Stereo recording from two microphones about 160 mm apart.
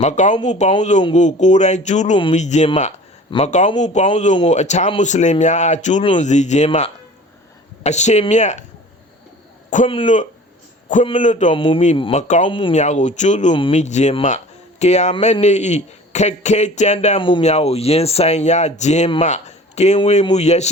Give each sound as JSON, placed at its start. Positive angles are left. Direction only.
{"t": 0.0, "sound": "speech", "side_deg": 50}
{"t": 9.8, "sound": "speech", "side_deg": 35}
{"t": 11.2, "sound": "speech", "side_deg": 50}
{"t": 11.5, "sound": "speech", "side_deg": 35}
{"t": 12.7, "sound": "speech", "side_deg": 45}
{"t": 13.5, "sound": "speech", "side_deg": 35}
{"t": 13.7, "sound": "speech", "side_deg": 45}
{"t": 17.2, "sound": "speech", "side_deg": 30}